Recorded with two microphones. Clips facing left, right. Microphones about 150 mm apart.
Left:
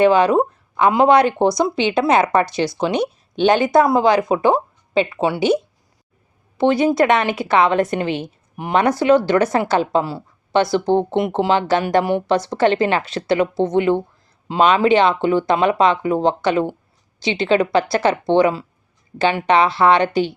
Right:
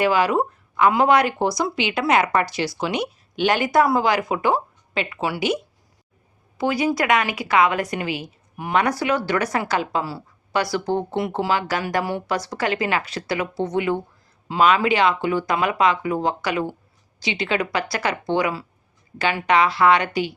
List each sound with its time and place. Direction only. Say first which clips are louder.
0.0 s speech: left 6 dB; 20° left (ahead or behind)
6.6 s speech: left 6 dB; 25° left (ahead or behind)